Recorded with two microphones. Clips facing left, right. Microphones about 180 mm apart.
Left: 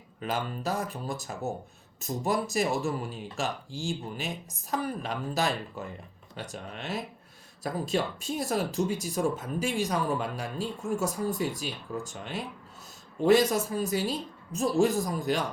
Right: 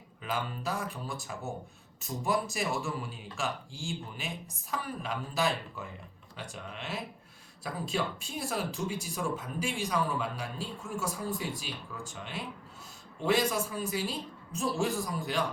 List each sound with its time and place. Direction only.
0.2 s speech: 40° left (ahead or behind)